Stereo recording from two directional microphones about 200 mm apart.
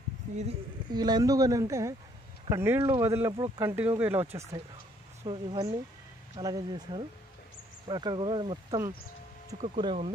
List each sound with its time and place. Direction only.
0.8 s speech: 20° right (ahead or behind)
5.2 s speech: 25° right (ahead or behind)